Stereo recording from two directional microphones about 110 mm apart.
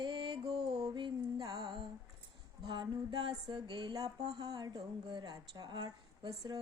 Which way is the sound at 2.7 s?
45° right (ahead or behind).